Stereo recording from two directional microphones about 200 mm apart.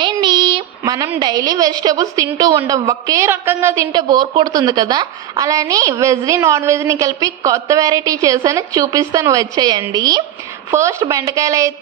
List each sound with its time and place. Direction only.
0.0 s a woman's voice: 20° right (ahead or behind)